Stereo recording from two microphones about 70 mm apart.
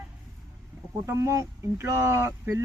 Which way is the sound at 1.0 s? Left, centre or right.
Right.